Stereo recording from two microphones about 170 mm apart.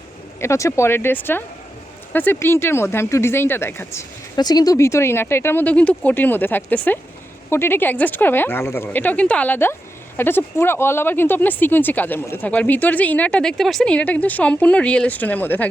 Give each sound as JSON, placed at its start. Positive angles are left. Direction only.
{"t": 0.3, "sound": "speech", "side_deg": 15}